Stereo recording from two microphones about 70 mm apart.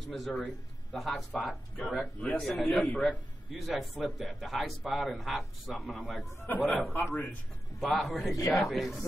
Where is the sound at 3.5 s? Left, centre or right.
Centre.